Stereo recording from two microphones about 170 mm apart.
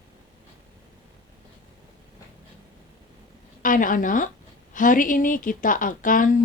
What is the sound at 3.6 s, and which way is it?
A woman's voice, 50° left (ahead or behind).